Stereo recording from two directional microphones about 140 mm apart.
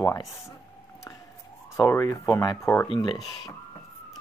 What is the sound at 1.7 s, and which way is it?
Speech, 20° left (ahead or behind).